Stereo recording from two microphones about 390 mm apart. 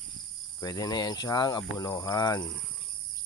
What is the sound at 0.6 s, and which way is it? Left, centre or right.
Speech, centre.